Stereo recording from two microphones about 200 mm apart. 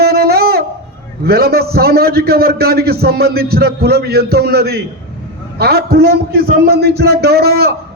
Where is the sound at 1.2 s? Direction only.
50° right (ahead or behind).